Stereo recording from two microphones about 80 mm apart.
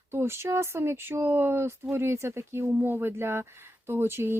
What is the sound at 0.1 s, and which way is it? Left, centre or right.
Speech, right.